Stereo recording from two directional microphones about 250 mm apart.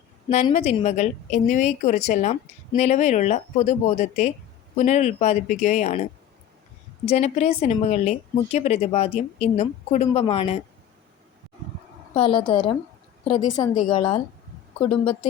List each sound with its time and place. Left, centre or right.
0.3 s a woman's voice: left
7.0 s a woman's voice: left
12.1 s a woman's voice: left